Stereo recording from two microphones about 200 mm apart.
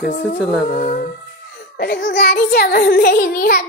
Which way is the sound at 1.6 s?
50° left (ahead or behind).